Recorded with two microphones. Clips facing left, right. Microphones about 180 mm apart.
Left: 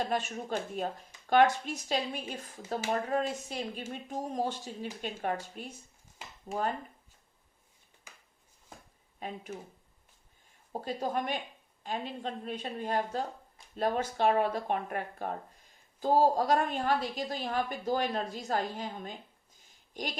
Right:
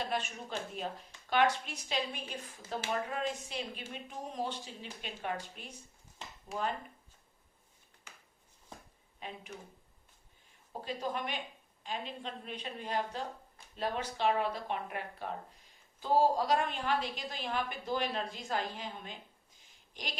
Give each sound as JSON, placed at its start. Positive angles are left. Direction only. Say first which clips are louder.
{"t": 0.0, "sound": "a woman's voice", "louder": "left 4 dB", "side_deg": 45}
{"t": 10.7, "sound": "a woman's voice", "louder": "left 3 dB", "side_deg": 45}
{"t": 19.9, "sound": "a sound", "louder": "left 7 dB", "side_deg": 45}